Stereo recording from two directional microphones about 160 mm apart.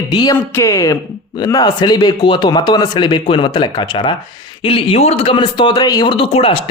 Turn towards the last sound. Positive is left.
turn(degrees=35)  # may be behind; listen again after turning